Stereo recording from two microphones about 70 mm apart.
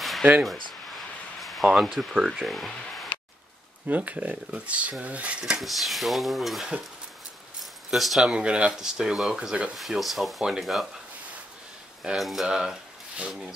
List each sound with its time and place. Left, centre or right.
0.2 s speech: centre
1.4 s a sound: centre
2.3 s speech: centre
3.8 s speech: right
5.4 s speech: centre
7.9 s speech: centre
8.3 s speech: centre
9.8 s speech: centre
12.2 s speech: centre